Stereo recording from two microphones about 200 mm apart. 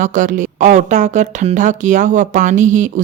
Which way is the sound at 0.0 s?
40° right (ahead or behind).